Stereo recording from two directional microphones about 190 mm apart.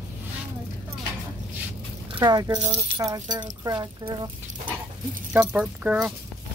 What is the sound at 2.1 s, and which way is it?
Speech, 20° right (ahead or behind).